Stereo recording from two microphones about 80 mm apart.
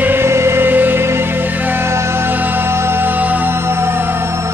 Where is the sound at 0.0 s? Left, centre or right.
Right.